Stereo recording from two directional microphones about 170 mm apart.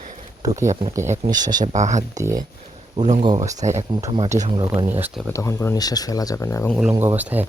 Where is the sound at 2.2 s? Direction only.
20° right (ahead or behind).